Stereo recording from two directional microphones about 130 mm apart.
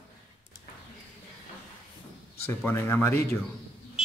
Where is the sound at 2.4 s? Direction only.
15° left (ahead or behind).